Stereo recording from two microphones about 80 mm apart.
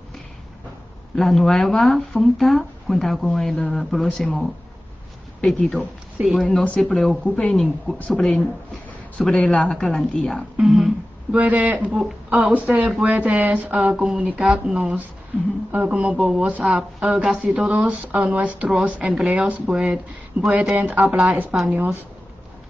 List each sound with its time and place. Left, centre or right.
1.1 s speech: centre
6.2 s speech: centre
6.6 s speech: centre
7.5 s speech: centre
11.3 s speech: centre